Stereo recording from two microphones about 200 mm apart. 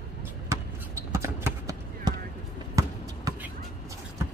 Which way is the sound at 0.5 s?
15° right (ahead or behind).